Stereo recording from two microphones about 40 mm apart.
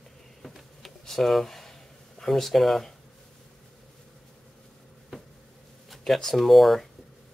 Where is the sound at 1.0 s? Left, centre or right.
Centre.